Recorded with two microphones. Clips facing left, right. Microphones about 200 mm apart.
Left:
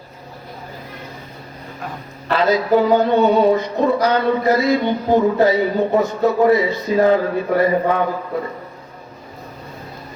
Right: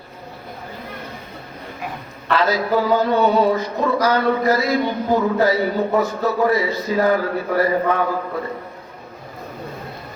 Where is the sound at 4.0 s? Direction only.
20° left (ahead or behind).